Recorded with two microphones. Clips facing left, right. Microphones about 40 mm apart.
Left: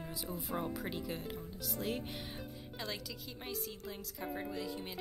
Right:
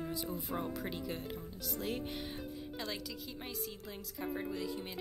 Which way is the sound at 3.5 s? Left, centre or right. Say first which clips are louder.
Left 1 dB; centre.